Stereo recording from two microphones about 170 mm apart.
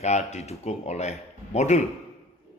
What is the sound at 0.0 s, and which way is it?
Speech, 40° left (ahead or behind).